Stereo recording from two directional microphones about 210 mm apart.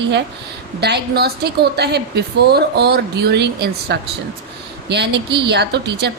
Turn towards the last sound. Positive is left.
turn(degrees=-55)  # may be behind; listen again after turning